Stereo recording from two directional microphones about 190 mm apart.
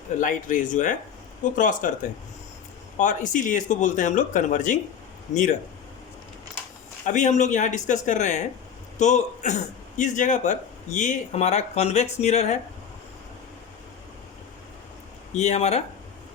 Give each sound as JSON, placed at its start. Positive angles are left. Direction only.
{"t": 0.2, "sound": "speech", "side_deg": 45}
{"t": 3.0, "sound": "speech", "side_deg": 40}
{"t": 7.0, "sound": "a man's voice", "side_deg": 40}
{"t": 15.4, "sound": "speech", "side_deg": 35}